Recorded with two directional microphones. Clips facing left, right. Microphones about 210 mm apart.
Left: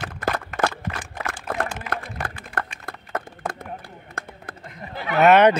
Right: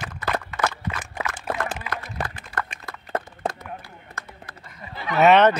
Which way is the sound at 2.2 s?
55° left (ahead or behind).